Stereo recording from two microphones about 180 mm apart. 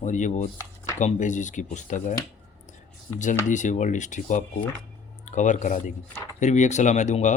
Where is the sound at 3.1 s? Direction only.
45° left (ahead or behind).